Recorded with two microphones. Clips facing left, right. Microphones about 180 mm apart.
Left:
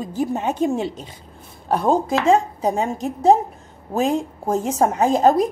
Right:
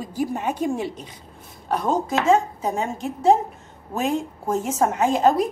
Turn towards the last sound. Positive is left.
turn(degrees=40)  # may be behind; listen again after turning